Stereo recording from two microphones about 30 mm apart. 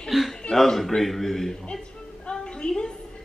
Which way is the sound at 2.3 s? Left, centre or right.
Left.